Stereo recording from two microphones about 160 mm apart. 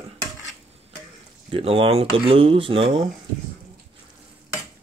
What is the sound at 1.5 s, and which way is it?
Speech, 35° right (ahead or behind).